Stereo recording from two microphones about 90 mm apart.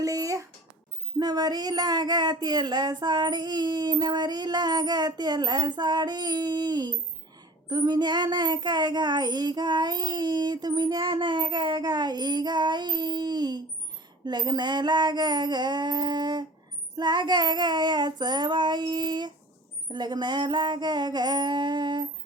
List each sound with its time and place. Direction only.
0.0 s music: 40° right (ahead or behind)
1.2 s speech: 50° right (ahead or behind)
11.0 s child singing: 65° right (ahead or behind)
11.8 s speech: 50° right (ahead or behind)
17.0 s child singing: 55° right (ahead or behind)